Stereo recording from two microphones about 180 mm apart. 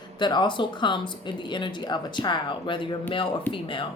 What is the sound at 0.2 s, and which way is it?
Speech, 25° left (ahead or behind).